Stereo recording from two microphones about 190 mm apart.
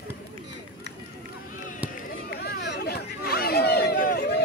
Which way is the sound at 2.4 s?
60° left (ahead or behind).